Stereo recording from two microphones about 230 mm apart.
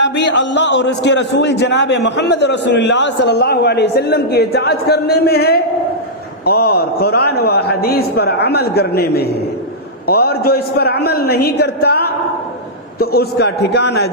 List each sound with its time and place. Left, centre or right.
0.0 s a man's voice: left